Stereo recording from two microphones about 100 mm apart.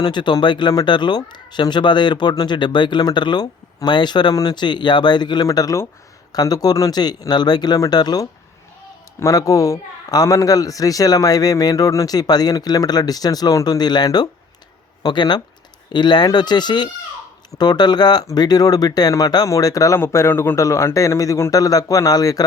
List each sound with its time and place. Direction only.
0.0 s speech: 50° left (ahead or behind)
5.5 s a man's voice: 35° left (ahead or behind)
20.0 s a man's voice: 25° left (ahead or behind)